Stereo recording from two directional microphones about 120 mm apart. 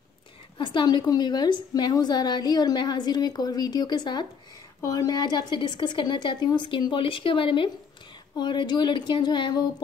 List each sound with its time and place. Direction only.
0.6 s a woman's voice: 40° left (ahead or behind)